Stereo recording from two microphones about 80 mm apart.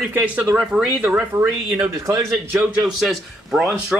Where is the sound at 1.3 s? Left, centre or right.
Right.